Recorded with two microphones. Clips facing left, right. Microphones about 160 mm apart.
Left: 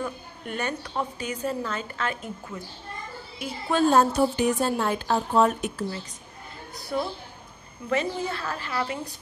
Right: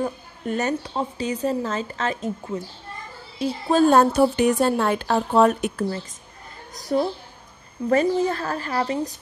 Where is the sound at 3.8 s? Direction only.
65° right (ahead or behind).